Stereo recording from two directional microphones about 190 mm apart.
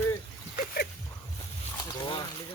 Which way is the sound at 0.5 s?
50° left (ahead or behind).